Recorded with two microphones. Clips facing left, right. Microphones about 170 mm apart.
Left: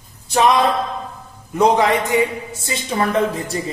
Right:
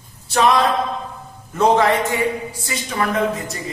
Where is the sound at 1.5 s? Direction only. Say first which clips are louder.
Even; 15° left (ahead or behind).